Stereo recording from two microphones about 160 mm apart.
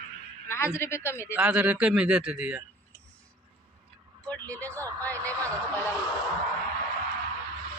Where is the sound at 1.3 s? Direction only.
10° right (ahead or behind).